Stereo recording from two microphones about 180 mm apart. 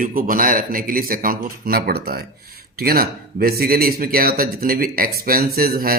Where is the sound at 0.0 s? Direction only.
50° right (ahead or behind).